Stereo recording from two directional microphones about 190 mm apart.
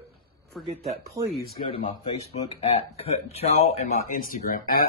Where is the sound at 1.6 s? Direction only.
30° left (ahead or behind).